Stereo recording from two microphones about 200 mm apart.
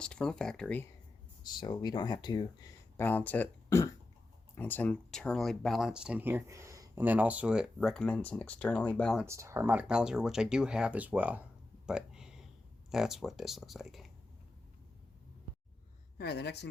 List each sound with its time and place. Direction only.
0.0 s speech: 5° left (ahead or behind)
1.5 s speech: 20° left (ahead or behind)
3.0 s speech: 10° left (ahead or behind)
9.2 s speech: 15° right (ahead or behind)
11.9 s a sound: 5° right (ahead or behind)
12.9 s speech: centre (ahead or behind)
16.1 s speech: 55° left (ahead or behind)